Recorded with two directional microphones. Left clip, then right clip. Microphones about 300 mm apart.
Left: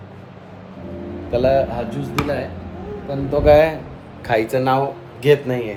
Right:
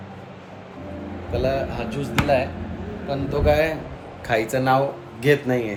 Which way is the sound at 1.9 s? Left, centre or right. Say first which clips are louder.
Right 2 dB; centre.